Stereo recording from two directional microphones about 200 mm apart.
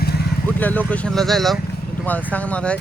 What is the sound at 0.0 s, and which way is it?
Vehicle, 50° left (ahead or behind).